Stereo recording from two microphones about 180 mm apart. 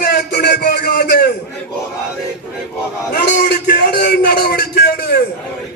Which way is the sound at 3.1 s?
70° left (ahead or behind).